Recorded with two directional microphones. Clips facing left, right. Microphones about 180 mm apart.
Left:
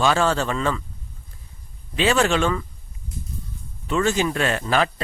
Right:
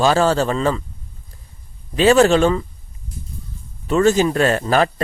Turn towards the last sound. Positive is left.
turn(degrees=-40)  # may be behind; listen again after turning